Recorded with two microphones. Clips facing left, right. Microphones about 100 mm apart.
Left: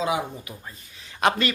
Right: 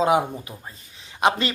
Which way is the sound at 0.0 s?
50° right (ahead or behind).